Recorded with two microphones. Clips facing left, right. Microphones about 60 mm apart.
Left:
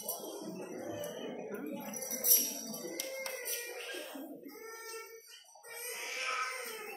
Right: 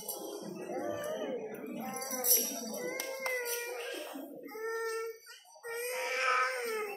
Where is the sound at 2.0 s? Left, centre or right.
Right.